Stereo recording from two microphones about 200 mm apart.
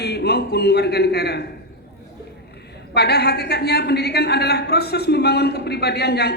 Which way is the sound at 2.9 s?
55° left (ahead or behind).